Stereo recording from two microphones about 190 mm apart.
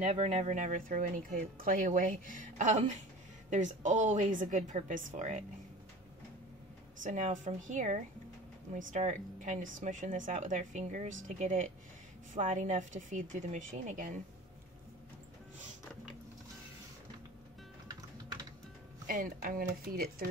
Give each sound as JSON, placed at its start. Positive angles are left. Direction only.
{"t": 0.0, "sound": "speech", "side_deg": -35}
{"t": 7.0, "sound": "speech", "side_deg": -40}
{"t": 17.8, "sound": "typing", "side_deg": -20}
{"t": 19.0, "sound": "speech", "side_deg": -45}